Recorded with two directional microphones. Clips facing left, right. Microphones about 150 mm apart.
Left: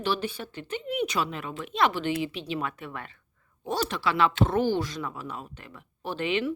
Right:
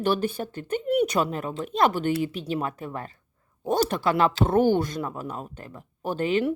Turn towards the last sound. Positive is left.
turn(degrees=-45)  # may be behind; listen again after turning